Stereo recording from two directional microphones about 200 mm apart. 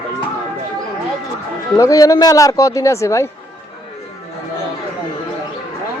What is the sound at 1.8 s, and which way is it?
Speech, 15° left (ahead or behind).